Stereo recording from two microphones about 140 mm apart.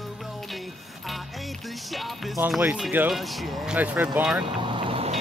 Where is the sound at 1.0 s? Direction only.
Centre (ahead or behind).